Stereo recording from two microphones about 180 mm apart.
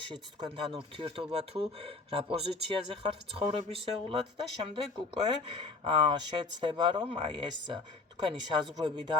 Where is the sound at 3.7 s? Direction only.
30° right (ahead or behind).